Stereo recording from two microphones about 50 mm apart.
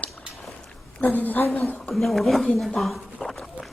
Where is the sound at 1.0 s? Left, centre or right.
Left.